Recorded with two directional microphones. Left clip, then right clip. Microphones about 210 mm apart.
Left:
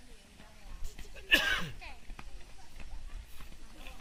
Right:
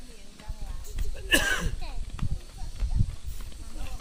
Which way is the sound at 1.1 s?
30° right (ahead or behind).